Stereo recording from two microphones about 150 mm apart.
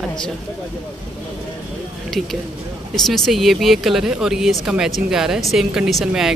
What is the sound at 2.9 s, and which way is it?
Speech, centre (ahead or behind).